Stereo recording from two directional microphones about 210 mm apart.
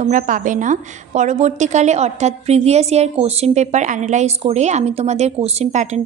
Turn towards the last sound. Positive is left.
turn(degrees=-35)  # may be behind; listen again after turning